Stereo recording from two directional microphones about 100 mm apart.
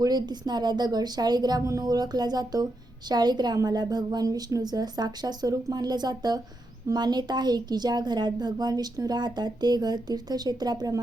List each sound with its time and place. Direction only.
0.0 s a woman's voice: 45° right (ahead or behind)